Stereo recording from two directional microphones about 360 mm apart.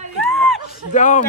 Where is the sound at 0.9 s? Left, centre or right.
Left.